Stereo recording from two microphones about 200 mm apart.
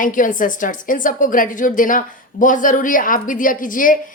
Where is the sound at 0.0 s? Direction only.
40° left (ahead or behind).